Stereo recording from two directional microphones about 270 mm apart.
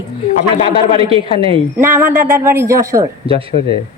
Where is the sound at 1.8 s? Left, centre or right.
Centre.